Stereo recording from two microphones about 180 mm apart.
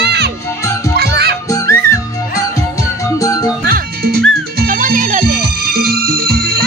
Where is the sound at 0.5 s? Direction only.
15° left (ahead or behind).